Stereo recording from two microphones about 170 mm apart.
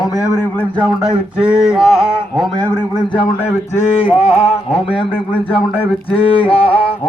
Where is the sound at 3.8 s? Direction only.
35° left (ahead or behind).